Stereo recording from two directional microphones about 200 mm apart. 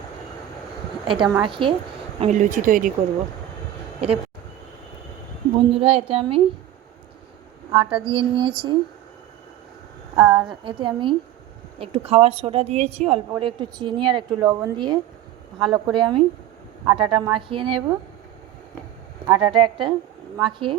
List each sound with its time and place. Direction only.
1.0 s a woman's voice: 25° right (ahead or behind)
2.2 s speech: 40° right (ahead or behind)
5.5 s a woman's voice: 30° right (ahead or behind)
7.7 s a woman's voice: 25° right (ahead or behind)
10.2 s a woman's voice: 25° right (ahead or behind)
19.3 s a woman's voice: 25° right (ahead or behind)